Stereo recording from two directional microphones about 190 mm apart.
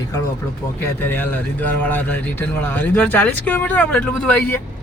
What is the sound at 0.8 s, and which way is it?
Speech, 10° left (ahead or behind).